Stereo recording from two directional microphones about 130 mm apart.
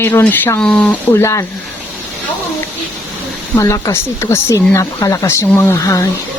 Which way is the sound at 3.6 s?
25° left (ahead or behind).